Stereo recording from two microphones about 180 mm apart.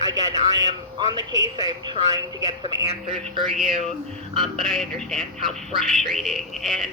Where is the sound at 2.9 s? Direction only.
35° right (ahead or behind).